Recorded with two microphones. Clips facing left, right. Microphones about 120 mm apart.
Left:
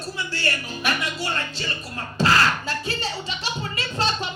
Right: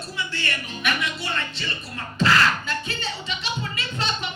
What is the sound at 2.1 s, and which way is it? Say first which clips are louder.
Beatboxing: even; 40° left (ahead or behind).